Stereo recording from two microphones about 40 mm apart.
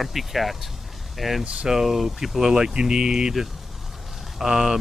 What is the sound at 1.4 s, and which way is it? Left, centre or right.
Speech, right.